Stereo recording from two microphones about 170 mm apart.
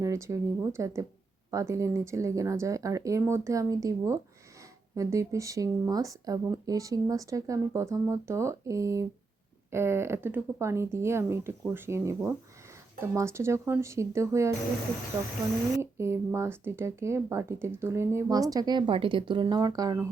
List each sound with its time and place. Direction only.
0.0 s speech: 20° right (ahead or behind)
15.8 s speech: 15° right (ahead or behind)